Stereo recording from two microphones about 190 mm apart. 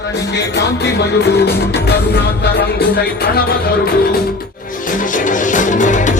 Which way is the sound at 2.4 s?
55° left (ahead or behind).